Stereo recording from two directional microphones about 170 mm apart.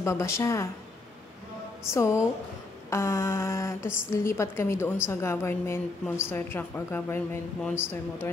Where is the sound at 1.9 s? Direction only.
15° left (ahead or behind).